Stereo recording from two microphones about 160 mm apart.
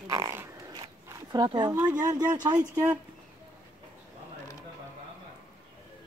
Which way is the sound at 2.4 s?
25° right (ahead or behind).